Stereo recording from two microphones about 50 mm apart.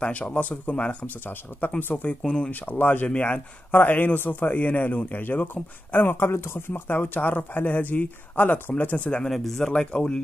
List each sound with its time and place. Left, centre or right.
0.0 s speech: left
1.2 s a man's voice: left
2.0 s speech: centre
2.5 s a man's voice: left
3.1 s speech: left
3.7 s a man's voice: left
6.7 s a man's voice: left
9.3 s speech: centre
9.8 s speech: centre